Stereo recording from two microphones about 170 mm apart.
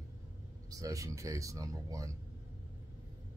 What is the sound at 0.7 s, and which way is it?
Speech, 20° right (ahead or behind).